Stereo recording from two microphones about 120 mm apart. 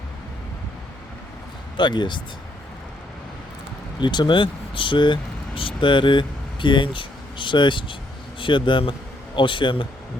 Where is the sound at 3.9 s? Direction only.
40° left (ahead or behind).